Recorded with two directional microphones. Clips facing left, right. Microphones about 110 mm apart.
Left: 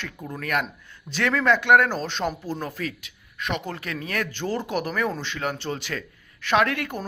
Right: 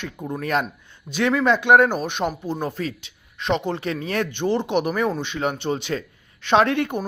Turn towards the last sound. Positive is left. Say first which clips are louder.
# right 4 dB
turn(degrees=-25)  # may be behind; listen again after turning